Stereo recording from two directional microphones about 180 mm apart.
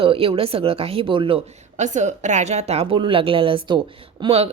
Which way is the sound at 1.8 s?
40° right (ahead or behind).